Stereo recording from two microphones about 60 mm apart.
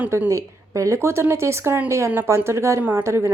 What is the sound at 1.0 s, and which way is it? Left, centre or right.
A woman's voice, right.